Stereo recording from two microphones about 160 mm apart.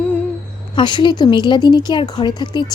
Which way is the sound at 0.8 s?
25° left (ahead or behind).